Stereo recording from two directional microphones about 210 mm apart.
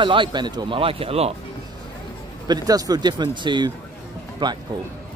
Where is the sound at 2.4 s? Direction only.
20° right (ahead or behind).